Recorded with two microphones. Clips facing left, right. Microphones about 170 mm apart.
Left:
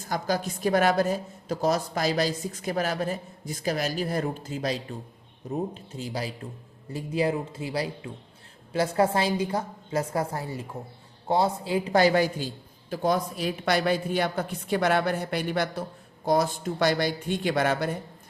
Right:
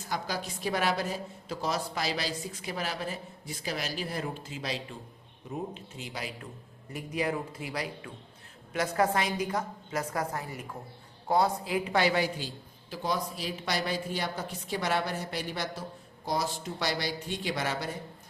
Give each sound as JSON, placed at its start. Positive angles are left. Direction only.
{"t": 0.0, "sound": "a woman's voice", "side_deg": 45}